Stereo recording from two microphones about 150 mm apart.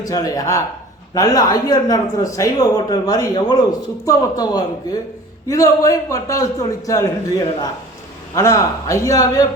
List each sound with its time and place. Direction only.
0.0 s speech: 25° left (ahead or behind)